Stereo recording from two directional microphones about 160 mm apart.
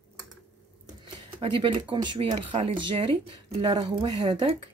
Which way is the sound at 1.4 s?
35° right (ahead or behind).